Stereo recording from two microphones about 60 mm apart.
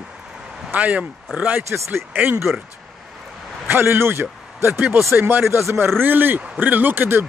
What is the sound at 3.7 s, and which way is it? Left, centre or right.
A man's voice, right.